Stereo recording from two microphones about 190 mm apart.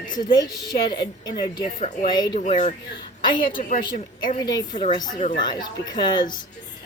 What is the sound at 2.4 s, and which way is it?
Speech, 40° left (ahead or behind).